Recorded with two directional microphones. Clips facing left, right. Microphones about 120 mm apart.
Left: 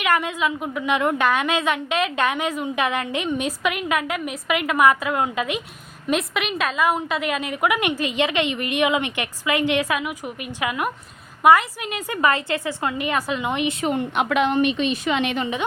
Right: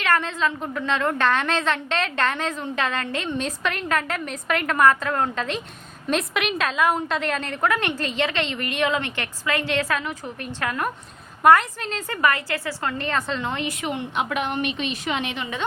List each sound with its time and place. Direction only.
0.0 s a woman's voice: 15° left (ahead or behind)
13.8 s a woman's voice: 45° left (ahead or behind)
14.2 s a woman's voice: 85° left